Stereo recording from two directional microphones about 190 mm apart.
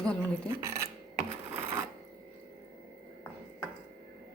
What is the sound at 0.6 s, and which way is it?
Speech, 15° right (ahead or behind).